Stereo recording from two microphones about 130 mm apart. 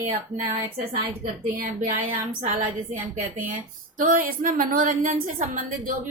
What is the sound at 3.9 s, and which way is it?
A woman's voice, 90° right.